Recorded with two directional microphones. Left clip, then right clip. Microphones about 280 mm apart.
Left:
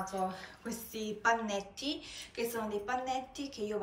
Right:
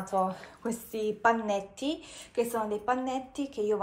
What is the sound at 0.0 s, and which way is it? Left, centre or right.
A woman's voice, centre.